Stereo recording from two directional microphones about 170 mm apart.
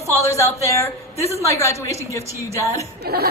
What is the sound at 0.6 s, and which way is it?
A woman's voice, 20° left (ahead or behind).